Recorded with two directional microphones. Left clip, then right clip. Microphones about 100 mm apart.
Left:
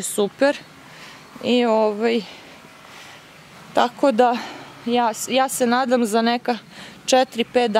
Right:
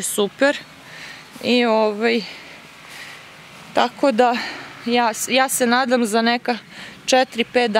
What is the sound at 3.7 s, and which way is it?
Speech, 5° left (ahead or behind).